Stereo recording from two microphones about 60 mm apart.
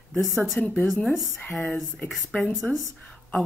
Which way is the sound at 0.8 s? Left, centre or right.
Centre.